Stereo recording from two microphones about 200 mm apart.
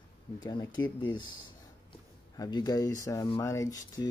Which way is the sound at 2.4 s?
20° left (ahead or behind).